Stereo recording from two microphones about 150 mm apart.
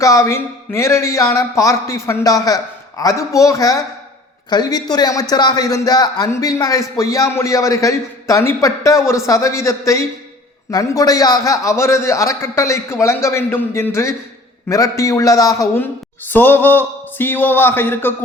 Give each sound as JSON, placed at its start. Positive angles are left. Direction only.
{"t": 0.0, "sound": "a man's voice", "side_deg": 20}